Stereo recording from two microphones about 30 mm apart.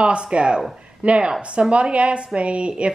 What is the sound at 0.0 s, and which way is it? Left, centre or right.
A woman's voice, right.